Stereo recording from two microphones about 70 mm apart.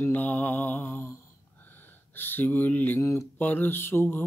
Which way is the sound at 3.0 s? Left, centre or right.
Left.